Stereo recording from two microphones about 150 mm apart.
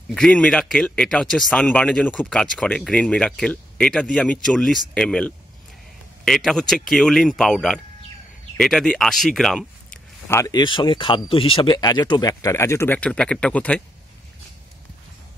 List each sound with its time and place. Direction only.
0.1 s speech: 5° left (ahead or behind)
10.2 s speech: 15° left (ahead or behind)
10.5 s speech: 30° left (ahead or behind); by 13.8 s 10° left (ahead or behind)